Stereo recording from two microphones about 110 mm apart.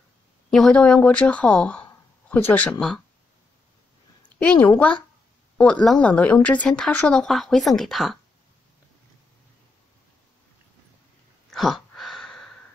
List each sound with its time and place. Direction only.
0.5 s speech: 5° left (ahead or behind)
4.4 s a woman's voice: 10° left (ahead or behind)
11.5 s a sound: centre (ahead or behind)